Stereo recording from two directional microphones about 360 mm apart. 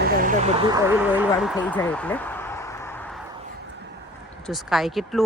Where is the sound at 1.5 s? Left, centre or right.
Centre.